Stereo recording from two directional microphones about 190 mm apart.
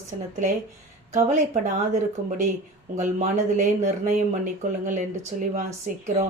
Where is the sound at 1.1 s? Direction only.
40° right (ahead or behind).